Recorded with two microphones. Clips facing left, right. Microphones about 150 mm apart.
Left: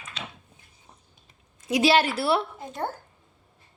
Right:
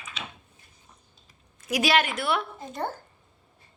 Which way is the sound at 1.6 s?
25° left (ahead or behind).